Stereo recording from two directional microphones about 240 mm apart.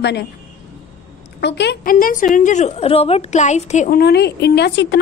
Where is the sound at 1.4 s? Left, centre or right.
Left.